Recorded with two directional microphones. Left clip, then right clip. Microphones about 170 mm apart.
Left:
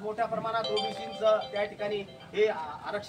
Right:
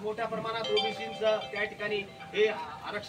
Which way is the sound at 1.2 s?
15° left (ahead or behind).